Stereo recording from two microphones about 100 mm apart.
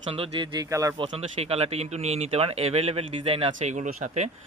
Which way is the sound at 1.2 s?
90° right.